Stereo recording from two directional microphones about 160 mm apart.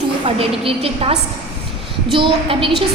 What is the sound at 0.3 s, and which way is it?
A woman's voice, 35° right (ahead or behind).